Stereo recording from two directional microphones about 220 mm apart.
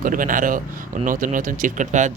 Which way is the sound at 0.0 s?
40° right (ahead or behind).